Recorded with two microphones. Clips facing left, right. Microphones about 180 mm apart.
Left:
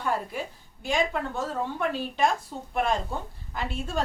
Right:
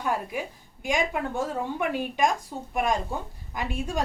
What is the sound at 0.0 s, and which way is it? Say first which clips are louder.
A woman's voice: right 1 dB; 10° right (ahead or behind).